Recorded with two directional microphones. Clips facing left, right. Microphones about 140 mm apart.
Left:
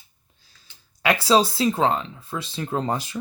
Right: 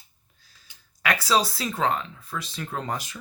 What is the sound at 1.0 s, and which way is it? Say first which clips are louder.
Speech: left 5 dB; 25° left (ahead or behind).